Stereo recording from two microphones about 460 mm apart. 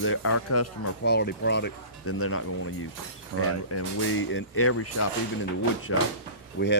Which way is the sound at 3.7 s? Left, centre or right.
Left.